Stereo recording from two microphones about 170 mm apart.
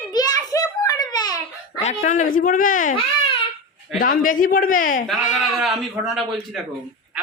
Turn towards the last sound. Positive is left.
turn(degrees=0)  # may be behind; listen again after turning